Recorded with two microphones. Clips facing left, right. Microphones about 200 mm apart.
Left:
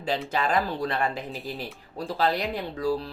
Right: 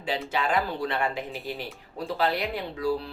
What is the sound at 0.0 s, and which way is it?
Speech, 40° left (ahead or behind).